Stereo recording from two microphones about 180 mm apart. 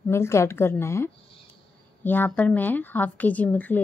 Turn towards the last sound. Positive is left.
turn(degrees=10)  # may be behind; listen again after turning